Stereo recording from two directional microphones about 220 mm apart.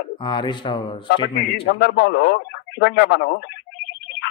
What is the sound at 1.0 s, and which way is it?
Speech, 50° left (ahead or behind).